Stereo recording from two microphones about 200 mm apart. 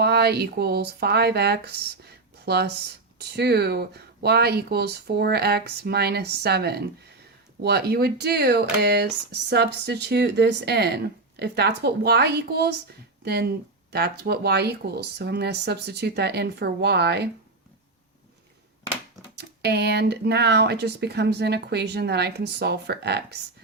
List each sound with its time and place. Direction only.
0.0 s speech: 55° right (ahead or behind)
19.4 s speech: 55° right (ahead or behind)